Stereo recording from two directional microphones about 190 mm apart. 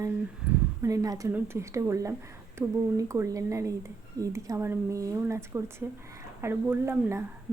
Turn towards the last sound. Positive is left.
turn(degrees=-15)  # may be behind; listen again after turning